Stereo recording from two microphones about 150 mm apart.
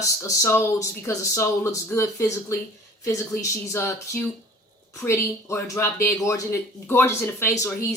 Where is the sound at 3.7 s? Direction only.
20° left (ahead or behind).